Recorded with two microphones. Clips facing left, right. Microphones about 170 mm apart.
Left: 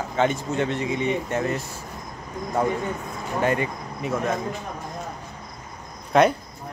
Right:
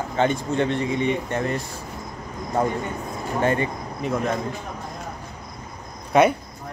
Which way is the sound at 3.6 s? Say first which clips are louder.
Right 2 dB; 5° left (ahead or behind).